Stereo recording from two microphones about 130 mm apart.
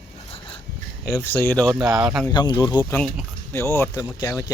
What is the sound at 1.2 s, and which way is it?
Speech, 20° left (ahead or behind).